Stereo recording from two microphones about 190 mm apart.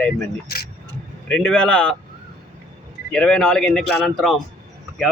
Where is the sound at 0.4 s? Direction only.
55° left (ahead or behind).